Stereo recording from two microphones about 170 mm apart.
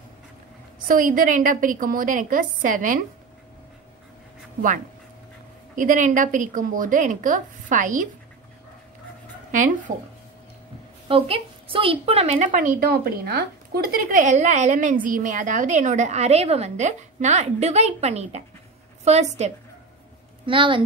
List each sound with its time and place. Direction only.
0.8 s speech: 55° right (ahead or behind)
5.8 s speech: 50° right (ahead or behind)
11.1 s a woman's voice: 35° right (ahead or behind)
12.4 s a woman's voice: 55° right (ahead or behind)
20.4 s a woman's voice: 30° right (ahead or behind)